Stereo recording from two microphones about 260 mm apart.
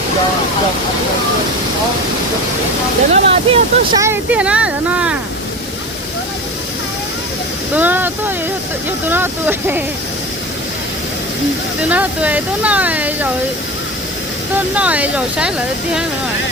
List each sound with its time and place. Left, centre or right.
3.1 s speech: right
4.0 s speech: centre
7.7 s speech: centre
11.8 s speech: centre
14.5 s speech: centre